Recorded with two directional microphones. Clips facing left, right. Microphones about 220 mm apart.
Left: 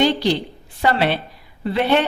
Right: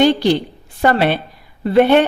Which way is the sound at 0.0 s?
50° right (ahead or behind).